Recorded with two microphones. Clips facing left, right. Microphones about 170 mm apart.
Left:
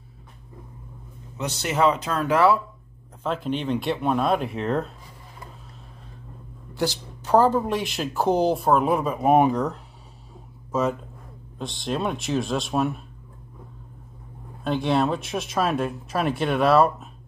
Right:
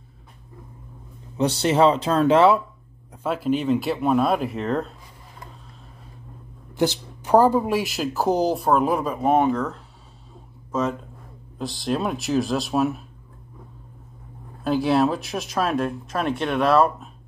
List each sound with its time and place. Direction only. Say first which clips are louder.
1.4 s speech: right 4 dB; 30° right (ahead or behind)
3.3 s speech: right 4 dB; 5° right (ahead or behind)
6.7 s speech: right 4 dB; 20° right (ahead or behind); by 9.3 s centre (ahead or behind)
9.3 s speech: left 1 dB; 15° left (ahead or behind)
10.7 s speech: left 1 dB; 5° left (ahead or behind)
14.6 s speech: right 3 dB; 5° right (ahead or behind)